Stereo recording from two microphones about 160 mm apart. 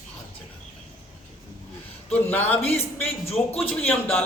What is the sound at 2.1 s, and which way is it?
A man's voice, 10° left (ahead or behind).